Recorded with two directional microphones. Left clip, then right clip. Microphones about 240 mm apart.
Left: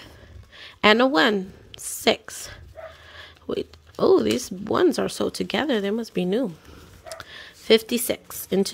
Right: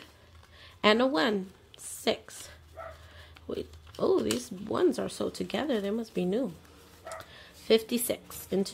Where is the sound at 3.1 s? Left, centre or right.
Left.